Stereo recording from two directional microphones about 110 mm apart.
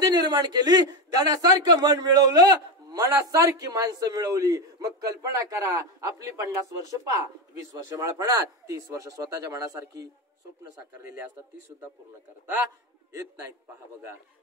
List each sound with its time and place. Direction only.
0.1 s a man's voice: 40° right (ahead or behind)
7.7 s a man's voice: 30° right (ahead or behind)
13.1 s a man's voice: 30° right (ahead or behind)